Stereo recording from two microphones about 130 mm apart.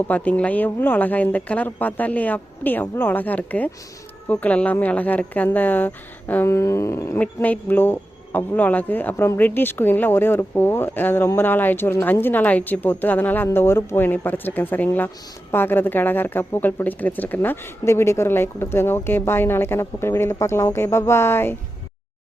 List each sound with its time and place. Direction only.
0.1 s a woman's voice: 10° left (ahead or behind)